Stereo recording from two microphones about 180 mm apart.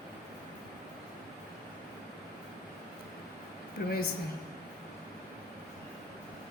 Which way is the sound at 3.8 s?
55° left (ahead or behind).